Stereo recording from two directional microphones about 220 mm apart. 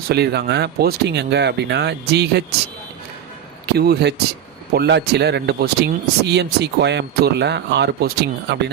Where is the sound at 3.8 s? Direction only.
45° right (ahead or behind).